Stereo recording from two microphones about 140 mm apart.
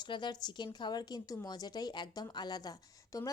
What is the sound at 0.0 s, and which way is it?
A woman's voice, 35° left (ahead or behind).